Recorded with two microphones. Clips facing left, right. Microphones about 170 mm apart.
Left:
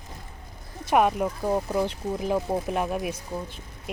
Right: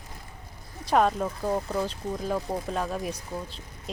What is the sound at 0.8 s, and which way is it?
Speech, 15° left (ahead or behind).